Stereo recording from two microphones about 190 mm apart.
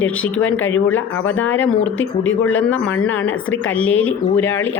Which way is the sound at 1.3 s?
10° left (ahead or behind).